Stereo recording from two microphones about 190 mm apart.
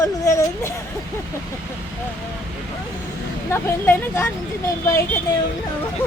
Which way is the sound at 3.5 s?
15° left (ahead or behind).